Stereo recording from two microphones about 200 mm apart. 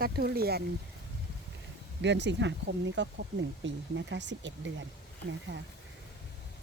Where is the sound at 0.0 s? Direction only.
50° right (ahead or behind).